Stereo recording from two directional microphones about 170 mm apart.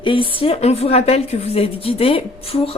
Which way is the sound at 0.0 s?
30° left (ahead or behind).